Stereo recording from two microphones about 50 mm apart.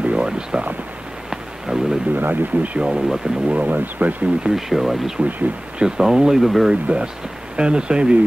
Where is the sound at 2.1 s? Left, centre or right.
Right.